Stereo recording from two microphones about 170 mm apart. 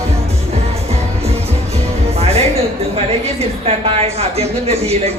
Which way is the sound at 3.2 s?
35° right (ahead or behind).